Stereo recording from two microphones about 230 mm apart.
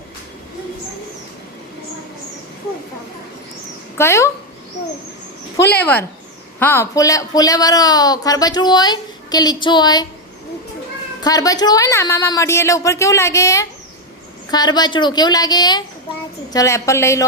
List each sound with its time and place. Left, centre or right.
3.9 s a woman's voice: centre
5.7 s a woman's voice: centre
11.2 s a woman's voice: centre